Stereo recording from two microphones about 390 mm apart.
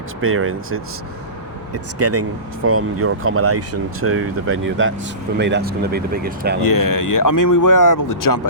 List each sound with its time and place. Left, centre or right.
0.2 s speech: right
6.6 s speech: left